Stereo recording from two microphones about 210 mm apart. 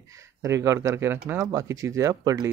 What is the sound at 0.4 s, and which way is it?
Speech, 15° right (ahead or behind).